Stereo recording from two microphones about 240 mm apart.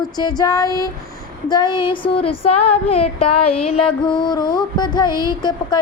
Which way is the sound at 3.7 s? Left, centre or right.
Left.